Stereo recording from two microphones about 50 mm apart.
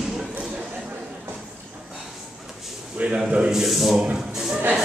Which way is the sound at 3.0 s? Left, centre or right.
Right.